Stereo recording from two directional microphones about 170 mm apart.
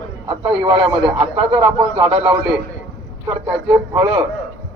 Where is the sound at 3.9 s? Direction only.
25° right (ahead or behind).